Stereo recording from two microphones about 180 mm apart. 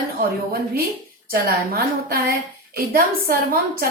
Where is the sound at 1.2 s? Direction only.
55° right (ahead or behind).